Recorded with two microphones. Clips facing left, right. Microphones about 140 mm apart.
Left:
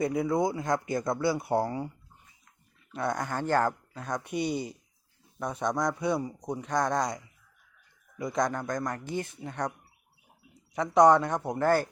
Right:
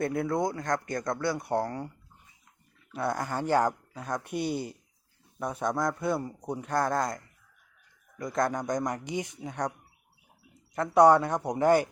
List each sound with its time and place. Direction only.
0.0 s a man's voice: centre (ahead or behind)
2.9 s a man's voice: 5° right (ahead or behind)
8.6 s speech: 20° right (ahead or behind)
10.8 s speech: 5° right (ahead or behind)